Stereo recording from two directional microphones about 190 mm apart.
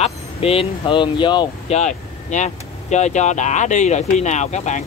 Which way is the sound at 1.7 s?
40° left (ahead or behind).